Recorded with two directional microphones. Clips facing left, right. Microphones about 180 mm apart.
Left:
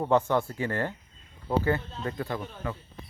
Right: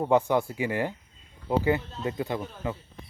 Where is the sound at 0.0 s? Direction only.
10° right (ahead or behind).